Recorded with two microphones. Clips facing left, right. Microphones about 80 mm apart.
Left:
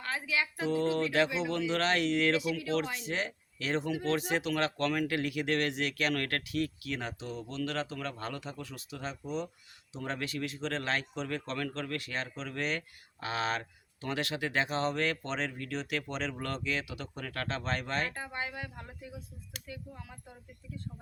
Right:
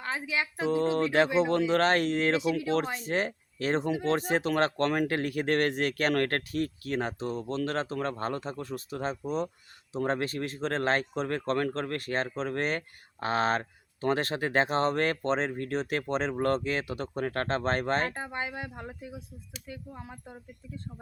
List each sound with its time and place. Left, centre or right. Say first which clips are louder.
0.0 s speech: right 2 dB; right
0.5 s speech: right 4 dB; right
18.1 s speech: right 3 dB; right